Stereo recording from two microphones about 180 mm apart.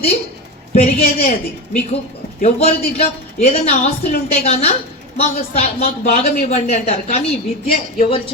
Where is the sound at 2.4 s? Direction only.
35° left (ahead or behind).